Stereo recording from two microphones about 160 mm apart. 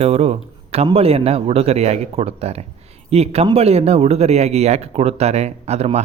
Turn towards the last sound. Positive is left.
turn(degrees=-40)  # may be behind; listen again after turning